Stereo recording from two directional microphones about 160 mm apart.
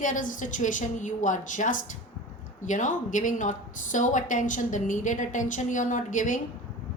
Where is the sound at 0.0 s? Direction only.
55° left (ahead or behind).